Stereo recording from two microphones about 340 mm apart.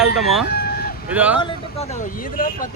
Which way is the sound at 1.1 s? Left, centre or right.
Centre.